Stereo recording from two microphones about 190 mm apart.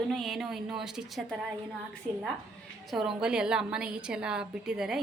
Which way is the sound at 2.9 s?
Centre (ahead or behind).